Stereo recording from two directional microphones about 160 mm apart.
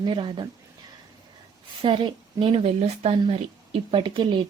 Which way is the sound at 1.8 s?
35° right (ahead or behind).